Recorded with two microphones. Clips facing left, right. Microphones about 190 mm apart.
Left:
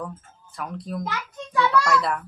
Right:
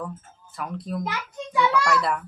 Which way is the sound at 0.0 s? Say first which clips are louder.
Even; centre (ahead or behind).